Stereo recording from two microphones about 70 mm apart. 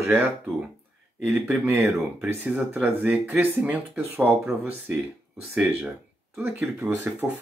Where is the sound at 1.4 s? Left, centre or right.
Right.